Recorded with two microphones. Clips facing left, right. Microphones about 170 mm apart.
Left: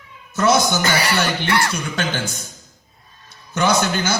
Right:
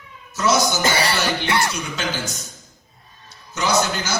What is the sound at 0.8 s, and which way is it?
Speech, 25° right (ahead or behind).